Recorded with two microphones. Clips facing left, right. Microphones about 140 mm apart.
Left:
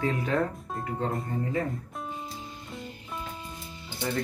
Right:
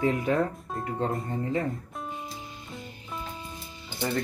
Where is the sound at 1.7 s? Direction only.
Centre (ahead or behind).